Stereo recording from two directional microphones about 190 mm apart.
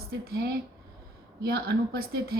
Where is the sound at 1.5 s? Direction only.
60° right (ahead or behind).